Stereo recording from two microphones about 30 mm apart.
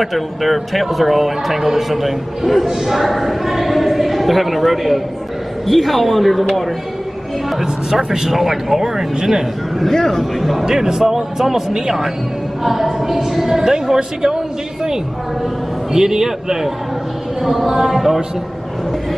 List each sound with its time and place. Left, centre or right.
0.0 s speech: centre
2.6 s a woman's voice: centre
2.9 s speech: centre
7.6 s a woman's voice: centre
9.8 s a man's voice: centre
10.7 s a woman's voice: centre
15.9 s a woman's voice: centre